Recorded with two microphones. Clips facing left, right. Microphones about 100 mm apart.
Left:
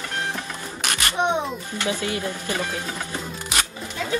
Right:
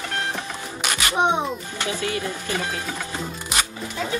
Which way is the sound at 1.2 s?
15° right (ahead or behind).